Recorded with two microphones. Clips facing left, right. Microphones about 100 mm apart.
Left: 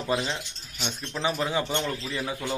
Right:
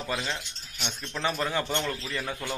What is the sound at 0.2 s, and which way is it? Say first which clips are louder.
A man's voice: left 2 dB; 10° left (ahead or behind).